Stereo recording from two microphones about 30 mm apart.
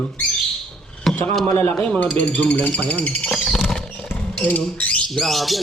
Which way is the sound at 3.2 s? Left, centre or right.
Left.